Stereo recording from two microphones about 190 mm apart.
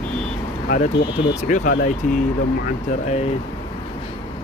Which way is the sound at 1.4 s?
45° left (ahead or behind).